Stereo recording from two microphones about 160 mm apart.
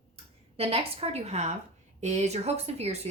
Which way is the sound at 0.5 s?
40° right (ahead or behind).